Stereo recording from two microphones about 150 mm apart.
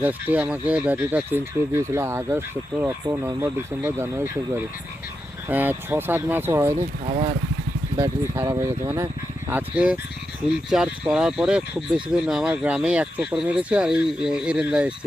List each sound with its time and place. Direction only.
0.0 s speech: 10° right (ahead or behind)
6.7 s speech: 50° right (ahead or behind)
7.9 s speech: 20° right (ahead or behind)
9.5 s speech: 10° right (ahead or behind)